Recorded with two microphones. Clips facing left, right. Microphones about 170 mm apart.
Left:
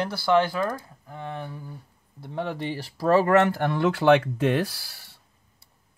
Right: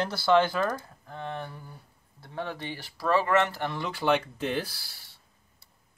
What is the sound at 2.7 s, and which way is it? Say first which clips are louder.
Speech: left 6 dB; 35° left (ahead or behind).